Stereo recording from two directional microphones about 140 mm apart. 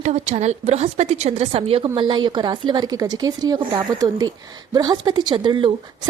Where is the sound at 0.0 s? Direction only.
55° right (ahead or behind).